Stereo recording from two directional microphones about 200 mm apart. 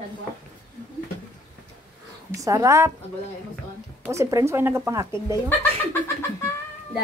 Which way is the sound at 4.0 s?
15° right (ahead or behind).